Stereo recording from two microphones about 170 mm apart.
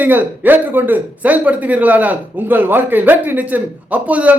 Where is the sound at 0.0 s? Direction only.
10° right (ahead or behind).